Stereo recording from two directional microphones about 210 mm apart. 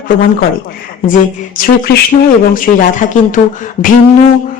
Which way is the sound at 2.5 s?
40° left (ahead or behind).